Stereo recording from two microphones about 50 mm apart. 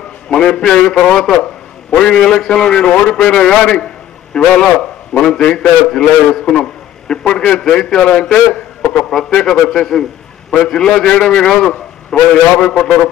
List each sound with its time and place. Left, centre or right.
0.3 s a man's voice: centre